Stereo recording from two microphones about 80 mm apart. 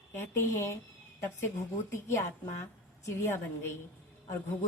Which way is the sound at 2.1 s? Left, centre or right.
Left.